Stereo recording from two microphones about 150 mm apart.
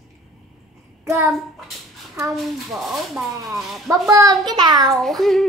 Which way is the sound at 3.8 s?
20° right (ahead or behind).